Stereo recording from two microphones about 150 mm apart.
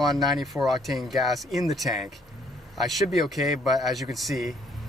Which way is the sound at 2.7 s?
Centre (ahead or behind).